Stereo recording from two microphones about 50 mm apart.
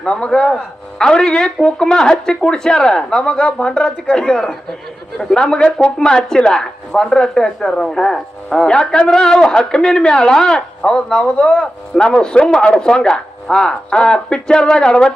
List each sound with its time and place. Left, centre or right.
0.0 s speech: left